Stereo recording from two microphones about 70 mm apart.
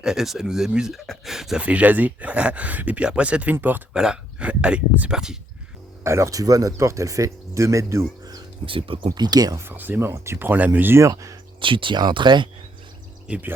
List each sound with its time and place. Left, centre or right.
0.0 s speech: centre
1.0 s speech: centre
1.3 s speech: centre
1.6 s speech: right
3.9 s speech: centre
6.0 s speech: right
9.0 s speech: right
9.6 s speech: right
10.1 s speech: right
10.5 s speech: right
11.9 s speech: right